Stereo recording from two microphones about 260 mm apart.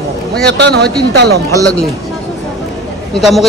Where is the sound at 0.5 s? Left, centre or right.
Right.